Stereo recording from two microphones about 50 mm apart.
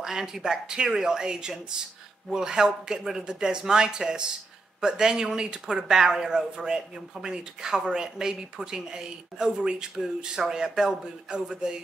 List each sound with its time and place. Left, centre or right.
0.0 s speech: centre